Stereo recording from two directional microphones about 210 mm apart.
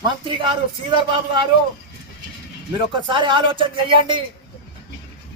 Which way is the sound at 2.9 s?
20° right (ahead or behind).